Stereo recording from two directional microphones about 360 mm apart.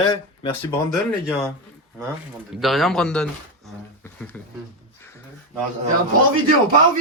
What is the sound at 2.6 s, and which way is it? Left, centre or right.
Speech, centre.